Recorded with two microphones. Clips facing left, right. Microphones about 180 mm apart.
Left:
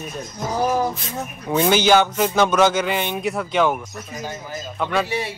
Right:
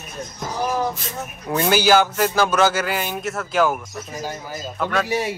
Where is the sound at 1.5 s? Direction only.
Centre (ahead or behind).